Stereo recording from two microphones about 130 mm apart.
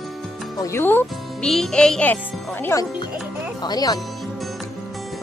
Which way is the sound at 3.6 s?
30° left (ahead or behind).